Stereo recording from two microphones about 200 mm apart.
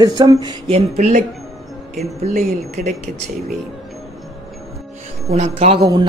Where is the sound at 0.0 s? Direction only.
20° right (ahead or behind).